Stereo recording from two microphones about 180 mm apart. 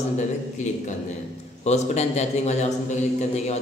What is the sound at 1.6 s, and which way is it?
A man's voice, 40° left (ahead or behind).